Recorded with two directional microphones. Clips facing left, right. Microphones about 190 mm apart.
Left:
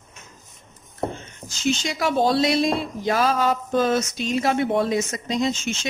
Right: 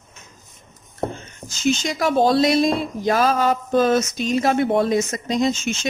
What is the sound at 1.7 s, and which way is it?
Speech, 45° right (ahead or behind).